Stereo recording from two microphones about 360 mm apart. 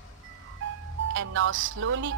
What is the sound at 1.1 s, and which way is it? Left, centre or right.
Speech, right.